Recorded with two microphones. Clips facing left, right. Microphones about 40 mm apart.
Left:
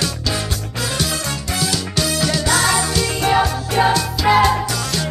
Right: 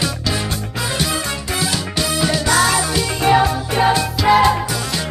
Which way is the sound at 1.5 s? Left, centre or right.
Centre.